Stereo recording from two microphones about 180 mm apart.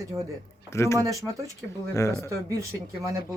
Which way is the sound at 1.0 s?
20° right (ahead or behind).